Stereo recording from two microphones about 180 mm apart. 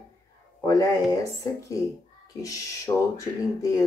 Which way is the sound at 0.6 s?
20° left (ahead or behind).